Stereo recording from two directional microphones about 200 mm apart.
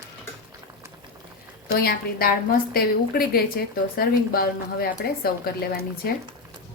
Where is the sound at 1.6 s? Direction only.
50° left (ahead or behind).